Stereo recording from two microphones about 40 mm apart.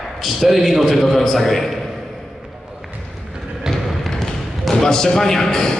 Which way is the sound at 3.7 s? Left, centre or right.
Centre.